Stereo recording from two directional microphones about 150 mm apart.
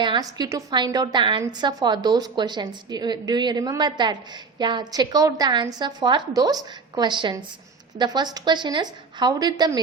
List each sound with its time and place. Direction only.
0.0 s a woman's voice: 30° right (ahead or behind)